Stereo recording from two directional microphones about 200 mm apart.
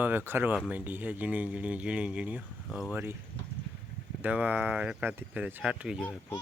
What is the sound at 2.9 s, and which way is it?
Speech, 10° right (ahead or behind).